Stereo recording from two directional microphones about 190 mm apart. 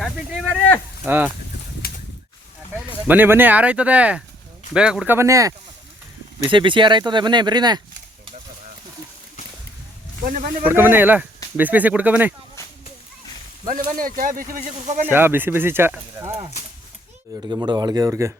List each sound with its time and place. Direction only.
0.0 s a sound: centre (ahead or behind)
1.0 s speech: 10° right (ahead or behind)
1.8 s a sound: 55° left (ahead or behind)
2.7 s speech: 10° right (ahead or behind)
10.7 s speech: 10° right (ahead or behind)
13.7 s speech: 45° right (ahead or behind)
15.0 s speech: 10° right (ahead or behind)
17.5 s speech: 20° right (ahead or behind)